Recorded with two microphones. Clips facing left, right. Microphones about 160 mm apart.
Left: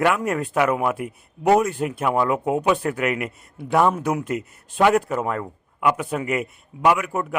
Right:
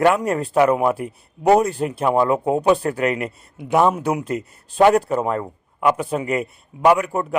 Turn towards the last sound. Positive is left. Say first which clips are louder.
# right 4 dB
turn(degrees=-35)  # may be behind; listen again after turning